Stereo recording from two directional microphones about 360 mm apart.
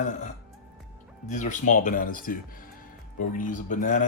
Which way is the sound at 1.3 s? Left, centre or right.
Left.